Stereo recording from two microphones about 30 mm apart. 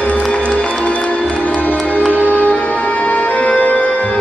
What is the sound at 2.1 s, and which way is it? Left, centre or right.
Music, left.